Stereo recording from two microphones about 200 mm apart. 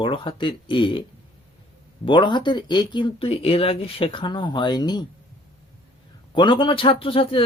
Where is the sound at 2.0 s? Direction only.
25° left (ahead or behind).